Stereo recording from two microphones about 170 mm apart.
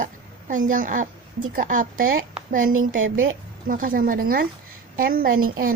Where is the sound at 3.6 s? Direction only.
55° right (ahead or behind).